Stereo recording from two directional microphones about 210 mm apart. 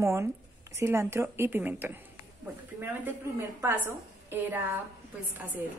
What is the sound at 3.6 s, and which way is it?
Speech, 10° right (ahead or behind).